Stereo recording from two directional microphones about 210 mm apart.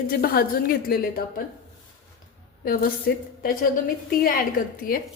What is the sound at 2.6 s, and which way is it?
Speech, 45° left (ahead or behind).